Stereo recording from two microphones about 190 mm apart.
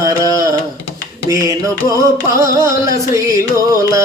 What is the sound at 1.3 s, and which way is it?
Music, 15° right (ahead or behind).